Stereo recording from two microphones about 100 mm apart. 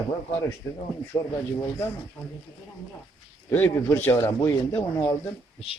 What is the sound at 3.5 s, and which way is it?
Speech, 25° left (ahead or behind).